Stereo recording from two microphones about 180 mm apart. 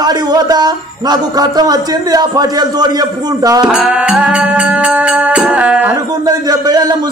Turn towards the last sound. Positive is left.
turn(degrees=-20)  # may be behind; listen again after turning